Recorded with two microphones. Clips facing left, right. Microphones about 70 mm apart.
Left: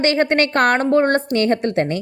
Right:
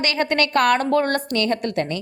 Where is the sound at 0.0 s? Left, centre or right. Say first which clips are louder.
Left 5 dB; left.